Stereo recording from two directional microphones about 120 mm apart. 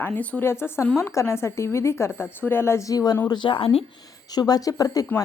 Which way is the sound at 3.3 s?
45° left (ahead or behind).